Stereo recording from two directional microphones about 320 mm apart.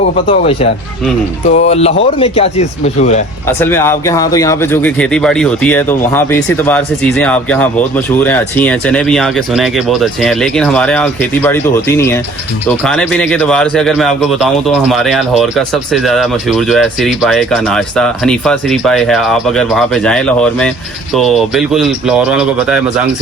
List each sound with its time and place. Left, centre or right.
0.3 s speech: centre
3.4 s speech: centre